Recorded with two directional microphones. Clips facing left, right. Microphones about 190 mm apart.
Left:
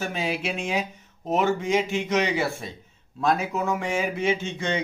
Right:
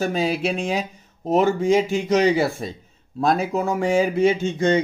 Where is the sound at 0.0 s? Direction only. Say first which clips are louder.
Right 6 dB; 35° right (ahead or behind).